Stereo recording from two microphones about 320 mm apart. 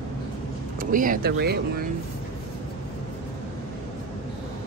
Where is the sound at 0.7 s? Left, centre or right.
Right.